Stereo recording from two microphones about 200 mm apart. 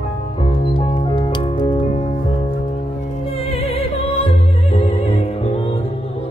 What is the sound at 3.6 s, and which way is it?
Music, 30° left (ahead or behind).